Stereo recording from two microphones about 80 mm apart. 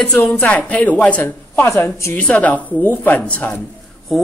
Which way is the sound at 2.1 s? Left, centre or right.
Centre.